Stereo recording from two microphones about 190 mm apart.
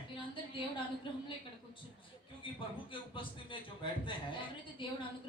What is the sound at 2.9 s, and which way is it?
Speech, 25° left (ahead or behind).